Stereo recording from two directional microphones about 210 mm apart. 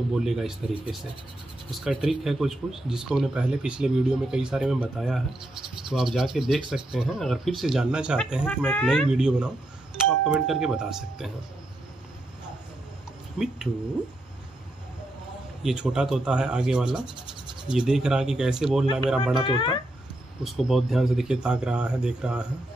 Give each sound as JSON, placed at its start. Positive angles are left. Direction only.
{"t": 0.2, "sound": "speech", "side_deg": 0}
{"t": 8.5, "sound": "speech", "side_deg": 5}
{"t": 15.6, "sound": "speech", "side_deg": -5}
{"t": 19.4, "sound": "speech", "side_deg": 25}
{"t": 20.4, "sound": "speech", "side_deg": 0}